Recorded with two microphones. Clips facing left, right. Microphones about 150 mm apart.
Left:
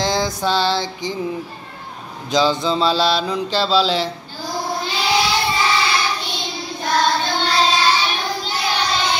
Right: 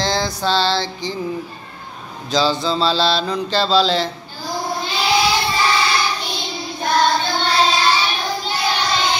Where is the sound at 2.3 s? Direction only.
15° left (ahead or behind).